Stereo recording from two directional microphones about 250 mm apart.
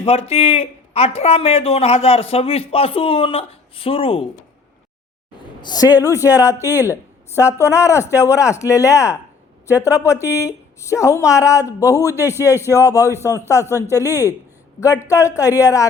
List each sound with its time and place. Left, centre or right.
0.0 s a man's voice: left
5.6 s a woman's voice: centre
6.1 s speech: centre
6.3 s a woman's voice: centre
6.6 s speech: centre
7.3 s a woman's voice: centre
12.2 s speech: centre
12.6 s a woman's voice: centre